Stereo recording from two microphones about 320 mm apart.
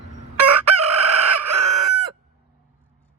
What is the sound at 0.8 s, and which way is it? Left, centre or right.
Chicken, right.